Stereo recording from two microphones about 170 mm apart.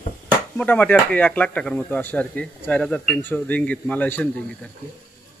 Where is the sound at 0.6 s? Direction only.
10° left (ahead or behind).